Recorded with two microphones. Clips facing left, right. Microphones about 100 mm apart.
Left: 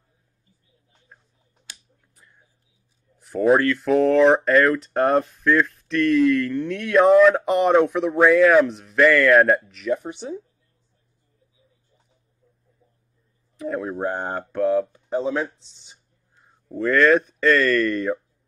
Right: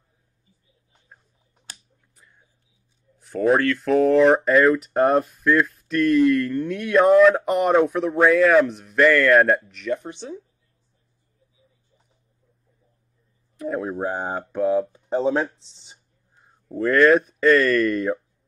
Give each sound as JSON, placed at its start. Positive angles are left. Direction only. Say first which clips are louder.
{"t": 1.7, "sound": "a sound", "louder": "right 1 dB", "side_deg": -40}
{"t": 3.2, "sound": "speech", "louder": "left 2 dB", "side_deg": 0}
{"t": 13.6, "sound": "speech", "louder": "even", "side_deg": 0}
{"t": 14.9, "sound": "speech", "louder": "right 3 dB", "side_deg": -30}
{"t": 16.7, "sound": "speech", "louder": "right 1 dB", "side_deg": -5}